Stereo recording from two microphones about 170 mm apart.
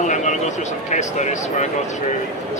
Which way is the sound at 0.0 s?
45° left (ahead or behind).